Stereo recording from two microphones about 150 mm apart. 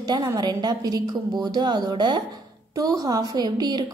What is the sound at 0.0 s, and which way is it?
A woman's voice, 25° right (ahead or behind).